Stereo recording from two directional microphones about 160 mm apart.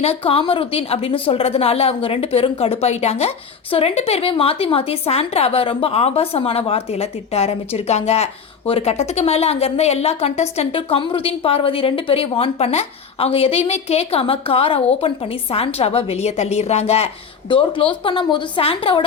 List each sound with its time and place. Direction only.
0.0 s a woman's voice: 40° left (ahead or behind)